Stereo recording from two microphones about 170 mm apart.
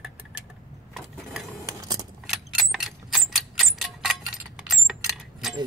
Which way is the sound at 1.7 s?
20° right (ahead or behind).